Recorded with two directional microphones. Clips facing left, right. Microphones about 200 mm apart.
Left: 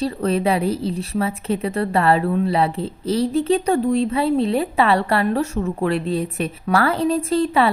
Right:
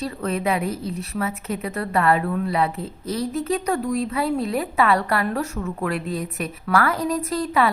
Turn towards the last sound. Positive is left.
turn(degrees=30)  # may be behind; listen again after turning